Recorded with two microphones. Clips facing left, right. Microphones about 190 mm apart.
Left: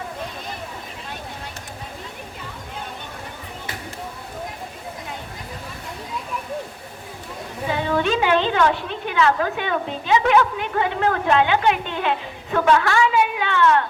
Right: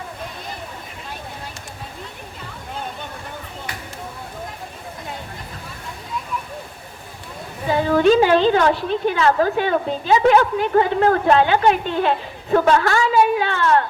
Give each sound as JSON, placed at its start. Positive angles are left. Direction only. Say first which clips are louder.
{"t": 7.7, "sound": "a woman's voice", "louder": "right 7 dB", "side_deg": -35}